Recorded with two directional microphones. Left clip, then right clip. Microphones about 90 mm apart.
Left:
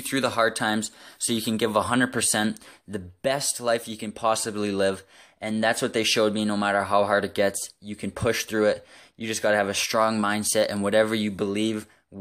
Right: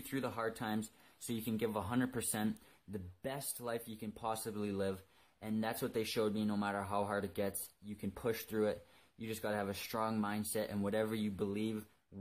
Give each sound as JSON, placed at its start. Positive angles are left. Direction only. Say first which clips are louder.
{"t": 0.1, "sound": "speech", "louder": "left 17 dB", "side_deg": 35}
{"t": 1.4, "sound": "speech", "louder": "left 15 dB", "side_deg": 35}